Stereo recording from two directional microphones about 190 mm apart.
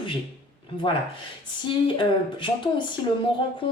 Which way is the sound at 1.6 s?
25° left (ahead or behind).